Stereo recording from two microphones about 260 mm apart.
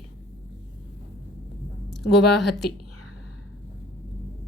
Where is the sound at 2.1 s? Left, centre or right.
Left.